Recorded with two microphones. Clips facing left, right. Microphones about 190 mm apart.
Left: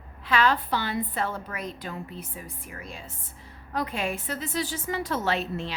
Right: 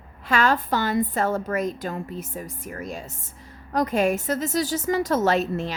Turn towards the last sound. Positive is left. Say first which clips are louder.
# right 6 dB
turn(degrees=-45)  # may be behind; listen again after turning